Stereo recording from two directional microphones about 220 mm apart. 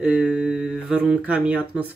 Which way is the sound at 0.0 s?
5° right (ahead or behind).